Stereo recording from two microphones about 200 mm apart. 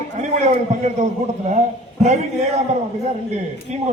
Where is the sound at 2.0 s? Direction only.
35° right (ahead or behind).